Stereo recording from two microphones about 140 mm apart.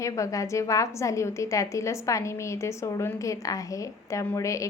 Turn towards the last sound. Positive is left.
turn(degrees=20)  # may be behind; listen again after turning